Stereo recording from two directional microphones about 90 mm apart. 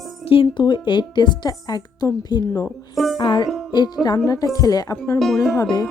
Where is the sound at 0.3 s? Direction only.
90° left.